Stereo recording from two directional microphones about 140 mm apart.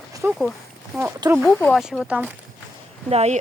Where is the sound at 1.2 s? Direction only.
30° right (ahead or behind).